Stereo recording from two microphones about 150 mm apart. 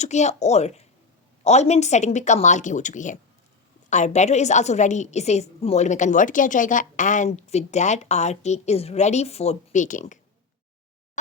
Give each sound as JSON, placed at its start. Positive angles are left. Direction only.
{"t": 0.0, "sound": "a woman's voice", "side_deg": 50}